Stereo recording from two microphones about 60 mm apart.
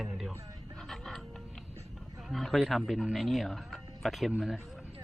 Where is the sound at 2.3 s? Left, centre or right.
Centre.